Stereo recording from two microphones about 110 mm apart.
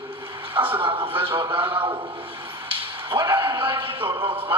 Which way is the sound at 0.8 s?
50° right (ahead or behind).